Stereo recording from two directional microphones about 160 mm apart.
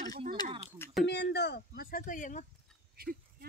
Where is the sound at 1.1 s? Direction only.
90° left; by 2.5 s 50° left (ahead or behind).